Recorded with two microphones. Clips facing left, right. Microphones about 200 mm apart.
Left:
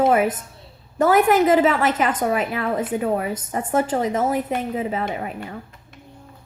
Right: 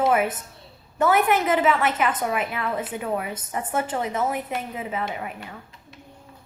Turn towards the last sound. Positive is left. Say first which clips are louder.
# left 5 dB
turn(degrees=40)  # may be behind; listen again after turning